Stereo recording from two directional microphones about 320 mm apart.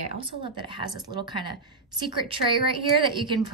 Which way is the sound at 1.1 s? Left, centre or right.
Centre.